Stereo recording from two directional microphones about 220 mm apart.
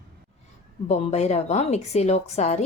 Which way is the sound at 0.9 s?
30° left (ahead or behind).